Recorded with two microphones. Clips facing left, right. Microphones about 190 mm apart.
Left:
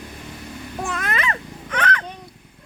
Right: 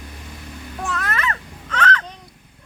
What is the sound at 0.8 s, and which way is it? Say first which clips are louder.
Babbling: even; 20° left (ahead or behind).